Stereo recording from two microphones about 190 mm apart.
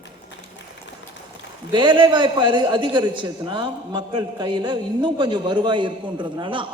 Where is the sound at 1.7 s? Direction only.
25° right (ahead or behind).